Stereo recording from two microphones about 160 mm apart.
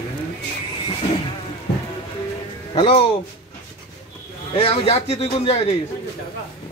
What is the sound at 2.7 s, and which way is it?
Speech, 35° left (ahead or behind).